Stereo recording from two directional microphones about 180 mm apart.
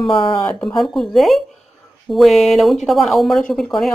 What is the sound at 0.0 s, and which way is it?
Speech, 30° left (ahead or behind).